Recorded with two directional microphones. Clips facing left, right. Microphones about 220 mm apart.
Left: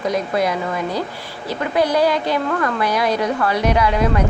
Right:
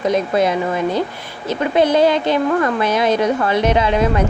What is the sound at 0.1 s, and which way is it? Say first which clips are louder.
A woman's voice: right 3 dB; 25° right (ahead or behind).